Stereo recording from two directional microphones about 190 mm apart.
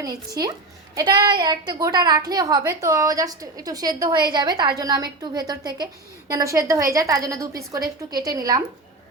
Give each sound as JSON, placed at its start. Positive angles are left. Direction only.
{"t": 0.0, "sound": "a woman's voice", "side_deg": -20}